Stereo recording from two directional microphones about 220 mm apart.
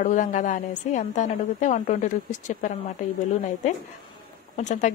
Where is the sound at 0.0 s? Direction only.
35° left (ahead or behind).